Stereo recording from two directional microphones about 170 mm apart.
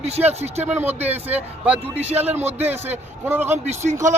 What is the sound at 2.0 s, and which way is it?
Speech, 40° right (ahead or behind).